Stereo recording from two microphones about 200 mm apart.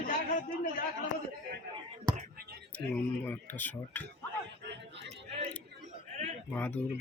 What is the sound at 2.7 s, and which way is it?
Speech, 10° left (ahead or behind).